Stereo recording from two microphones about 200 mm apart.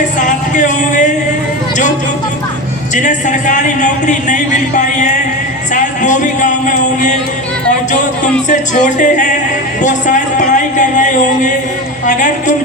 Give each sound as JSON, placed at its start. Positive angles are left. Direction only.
{"t": 0.2, "sound": "speech", "side_deg": 40}
{"t": 2.9, "sound": "speech", "side_deg": 40}
{"t": 9.0, "sound": "speech", "side_deg": 40}